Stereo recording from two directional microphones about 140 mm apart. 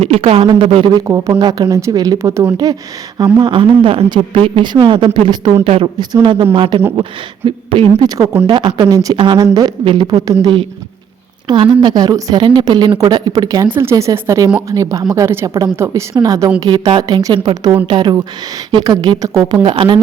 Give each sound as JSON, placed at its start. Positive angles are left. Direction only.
{"t": 0.0, "sound": "speech", "side_deg": -45}
{"t": 1.0, "sound": "a woman's voice", "side_deg": -25}
{"t": 13.7, "sound": "a woman's voice", "side_deg": -15}